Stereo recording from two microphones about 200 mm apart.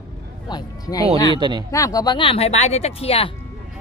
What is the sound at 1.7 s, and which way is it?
Speech, 15° left (ahead or behind).